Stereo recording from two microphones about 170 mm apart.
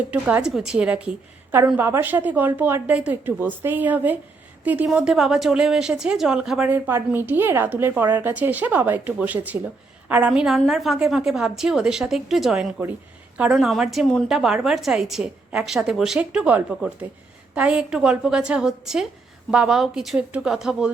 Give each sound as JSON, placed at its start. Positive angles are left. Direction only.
{"t": 0.1, "sound": "a woman's voice", "side_deg": -10}